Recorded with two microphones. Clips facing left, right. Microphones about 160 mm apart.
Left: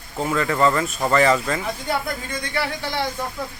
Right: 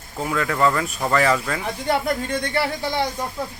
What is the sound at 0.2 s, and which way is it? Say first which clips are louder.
A man's voice: left 1 dB; centre (ahead or behind).